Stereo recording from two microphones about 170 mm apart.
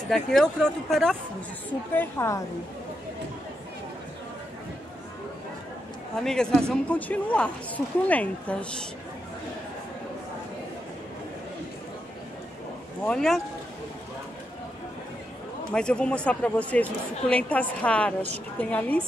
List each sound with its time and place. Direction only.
0.1 s speech: centre (ahead or behind)
2.0 s speech: 15° left (ahead or behind)
6.1 s speech: 5° left (ahead or behind)
13.0 s speech: 5° left (ahead or behind)
15.7 s speech: 5° left (ahead or behind)